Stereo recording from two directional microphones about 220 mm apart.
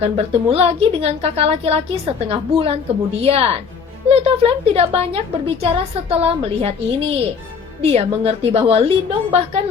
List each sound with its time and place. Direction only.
0.0 s a woman's voice: 25° right (ahead or behind)